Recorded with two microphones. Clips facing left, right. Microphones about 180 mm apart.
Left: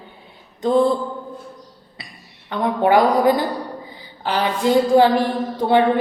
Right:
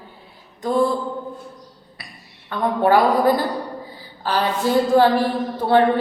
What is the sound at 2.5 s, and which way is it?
A man's voice, 15° left (ahead or behind).